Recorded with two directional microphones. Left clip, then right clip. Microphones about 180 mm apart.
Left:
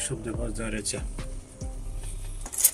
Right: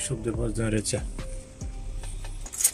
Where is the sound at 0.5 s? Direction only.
35° right (ahead or behind).